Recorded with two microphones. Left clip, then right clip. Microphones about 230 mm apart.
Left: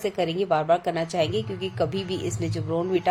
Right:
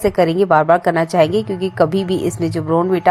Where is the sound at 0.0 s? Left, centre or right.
Right.